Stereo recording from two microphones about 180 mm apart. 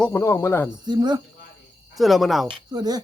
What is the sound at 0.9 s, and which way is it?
Speech, 25° right (ahead or behind).